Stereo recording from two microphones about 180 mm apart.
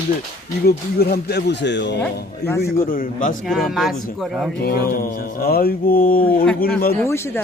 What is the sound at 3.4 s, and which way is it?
Speech, centre (ahead or behind).